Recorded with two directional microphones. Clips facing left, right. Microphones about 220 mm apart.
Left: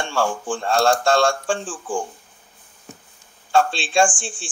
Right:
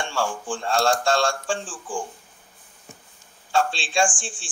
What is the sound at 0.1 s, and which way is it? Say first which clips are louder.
A man's voice: left 4 dB; 60° left (ahead or behind).